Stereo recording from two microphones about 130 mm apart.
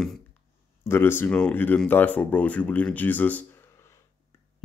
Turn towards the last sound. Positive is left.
turn(degrees=20)  # may be behind; listen again after turning